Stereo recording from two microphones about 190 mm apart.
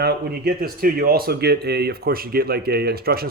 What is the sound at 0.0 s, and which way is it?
A man's voice, 55° right (ahead or behind).